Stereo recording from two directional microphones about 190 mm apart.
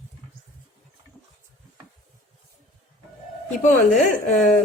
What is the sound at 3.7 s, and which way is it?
Speech, 40° left (ahead or behind).